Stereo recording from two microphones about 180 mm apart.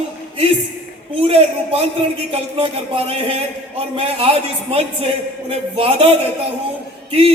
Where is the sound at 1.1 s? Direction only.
30° right (ahead or behind).